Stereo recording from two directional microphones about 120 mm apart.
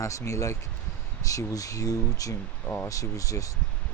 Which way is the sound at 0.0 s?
25° left (ahead or behind).